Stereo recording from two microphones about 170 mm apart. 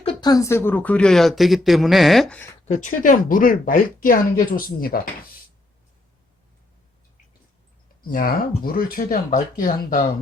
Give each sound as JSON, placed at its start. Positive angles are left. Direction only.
{"t": 0.0, "sound": "speech", "side_deg": 25}
{"t": 2.6, "sound": "speech", "side_deg": 45}
{"t": 8.0, "sound": "speech", "side_deg": 55}